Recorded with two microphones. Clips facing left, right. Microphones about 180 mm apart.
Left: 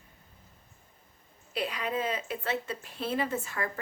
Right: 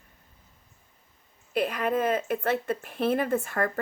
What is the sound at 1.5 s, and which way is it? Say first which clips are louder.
Speech: right 6 dB; 50° right (ahead or behind).